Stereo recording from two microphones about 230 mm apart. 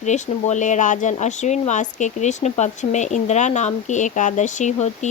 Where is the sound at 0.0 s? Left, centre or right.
Left.